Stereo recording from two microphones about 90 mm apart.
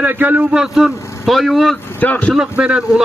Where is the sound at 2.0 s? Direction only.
20° left (ahead or behind).